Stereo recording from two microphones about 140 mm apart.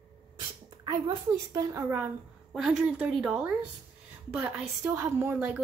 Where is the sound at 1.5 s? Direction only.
25° right (ahead or behind).